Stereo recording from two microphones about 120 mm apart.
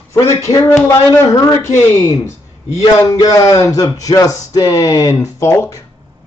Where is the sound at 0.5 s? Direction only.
20° left (ahead or behind).